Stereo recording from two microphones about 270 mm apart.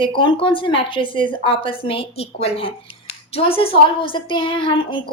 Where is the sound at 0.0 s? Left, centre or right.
Centre.